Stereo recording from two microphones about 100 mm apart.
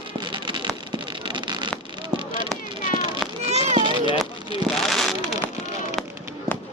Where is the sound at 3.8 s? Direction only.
55° right (ahead or behind).